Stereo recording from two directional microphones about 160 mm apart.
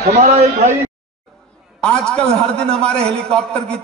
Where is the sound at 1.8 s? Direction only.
5° left (ahead or behind).